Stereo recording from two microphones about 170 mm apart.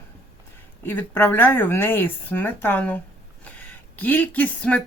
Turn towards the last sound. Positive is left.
turn(degrees=10)  # may be behind; listen again after turning